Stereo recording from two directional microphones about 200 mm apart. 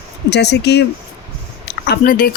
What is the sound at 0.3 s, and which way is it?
Speech, 55° left (ahead or behind).